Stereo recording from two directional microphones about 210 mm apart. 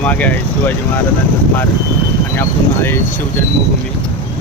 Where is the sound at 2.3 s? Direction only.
10° left (ahead or behind).